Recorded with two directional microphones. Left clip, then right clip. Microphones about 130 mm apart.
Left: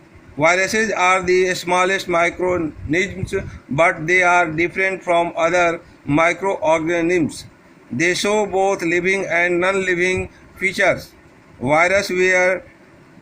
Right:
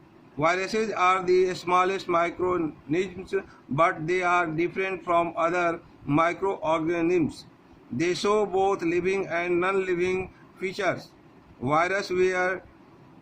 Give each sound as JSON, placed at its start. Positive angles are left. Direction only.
{"t": 0.3, "sound": "a man's voice", "side_deg": 25}